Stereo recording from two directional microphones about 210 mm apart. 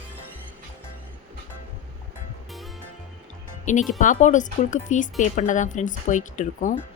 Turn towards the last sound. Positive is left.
turn(degrees=35)  # may be behind; listen again after turning